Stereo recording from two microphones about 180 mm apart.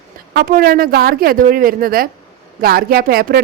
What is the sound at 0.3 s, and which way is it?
A woman's voice, 55° right (ahead or behind).